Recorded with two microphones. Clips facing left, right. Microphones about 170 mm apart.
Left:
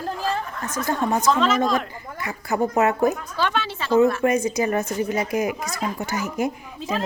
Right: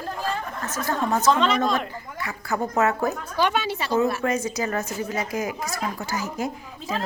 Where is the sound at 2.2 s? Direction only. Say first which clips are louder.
Left 4 dB; 15° left (ahead or behind).